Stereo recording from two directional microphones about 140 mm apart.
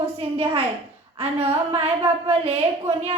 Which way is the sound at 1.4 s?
45° right (ahead or behind).